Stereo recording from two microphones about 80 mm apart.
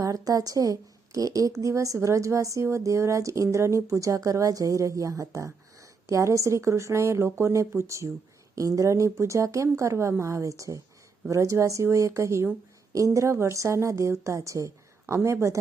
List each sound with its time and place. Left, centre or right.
0.0 s a woman's voice: right